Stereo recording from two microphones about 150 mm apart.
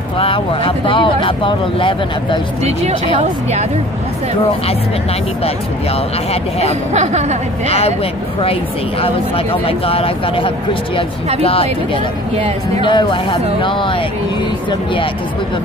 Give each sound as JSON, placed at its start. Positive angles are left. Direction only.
{"t": 0.2, "sound": "speech", "side_deg": 35}
{"t": 6.9, "sound": "speech", "side_deg": -50}
{"t": 7.6, "sound": "speech", "side_deg": 40}
{"t": 9.0, "sound": "speech", "side_deg": 40}
{"t": 12.4, "sound": "speech", "side_deg": -40}
{"t": 12.8, "sound": "speech", "side_deg": 30}